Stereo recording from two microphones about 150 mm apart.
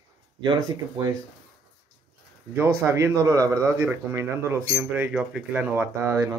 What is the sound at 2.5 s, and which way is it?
Speech, 15° right (ahead or behind).